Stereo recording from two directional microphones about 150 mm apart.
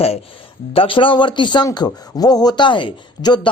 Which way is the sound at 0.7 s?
35° left (ahead or behind).